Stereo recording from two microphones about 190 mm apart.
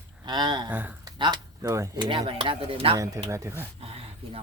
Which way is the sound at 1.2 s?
20° right (ahead or behind).